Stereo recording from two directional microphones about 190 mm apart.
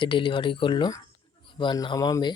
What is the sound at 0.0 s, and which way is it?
Speech, 25° left (ahead or behind).